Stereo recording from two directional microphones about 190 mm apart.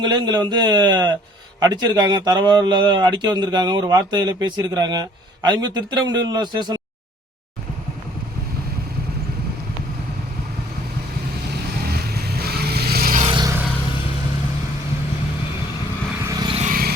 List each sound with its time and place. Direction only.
0.0 s speech: 20° right (ahead or behind)
12.1 s vehicle: 55° right (ahead or behind)
13.2 s vehicle: 25° right (ahead or behind)
16.3 s vehicle: 20° right (ahead or behind)
16.6 s a sound: 45° right (ahead or behind)